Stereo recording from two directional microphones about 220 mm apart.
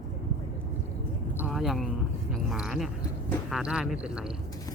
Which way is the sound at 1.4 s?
Centre (ahead or behind).